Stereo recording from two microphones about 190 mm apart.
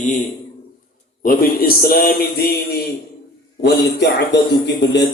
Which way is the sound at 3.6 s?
60° left (ahead or behind).